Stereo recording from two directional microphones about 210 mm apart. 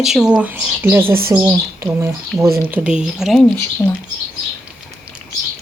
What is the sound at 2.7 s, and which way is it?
Speech, 5° right (ahead or behind).